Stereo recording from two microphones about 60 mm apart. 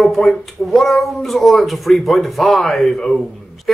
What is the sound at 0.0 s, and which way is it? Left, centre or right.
Speech, centre.